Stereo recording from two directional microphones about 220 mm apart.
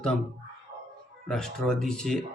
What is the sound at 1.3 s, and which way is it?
Speech, centre (ahead or behind).